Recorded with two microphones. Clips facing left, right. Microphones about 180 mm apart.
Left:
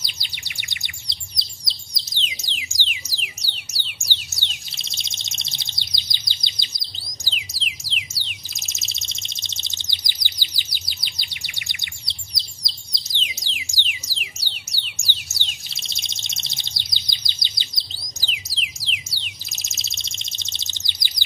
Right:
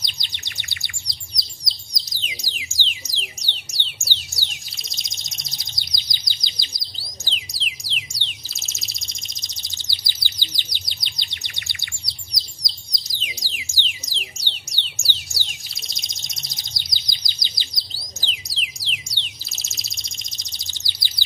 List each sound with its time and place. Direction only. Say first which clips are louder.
0.0 s bird: right 1 dB; 5° left (ahead or behind); by 2.8 s 25° left (ahead or behind)
2.9 s music: even; 10° left (ahead or behind)
7.2 s music: left 1 dB; 5° left (ahead or behind)
8.5 s bird: even; 20° left (ahead or behind)
13.4 s music: even; 20° left (ahead or behind)
18.2 s music: left 1 dB; 5° left (ahead or behind)
19.5 s bird: even; 20° left (ahead or behind)